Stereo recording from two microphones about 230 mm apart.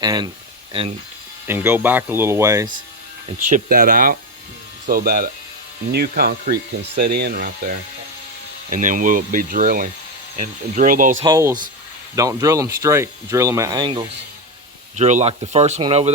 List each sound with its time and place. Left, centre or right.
0.0 s speech: centre
1.5 s speech: centre
3.5 s speech: right
11.2 s speech: centre
14.9 s speech: right